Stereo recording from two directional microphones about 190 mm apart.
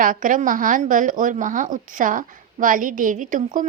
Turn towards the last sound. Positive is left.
turn(degrees=-45)  # may be behind; listen again after turning